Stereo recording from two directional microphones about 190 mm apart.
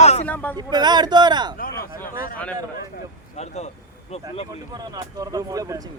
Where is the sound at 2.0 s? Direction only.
45° left (ahead or behind).